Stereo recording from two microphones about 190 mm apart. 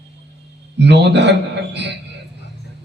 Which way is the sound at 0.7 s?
65° right (ahead or behind).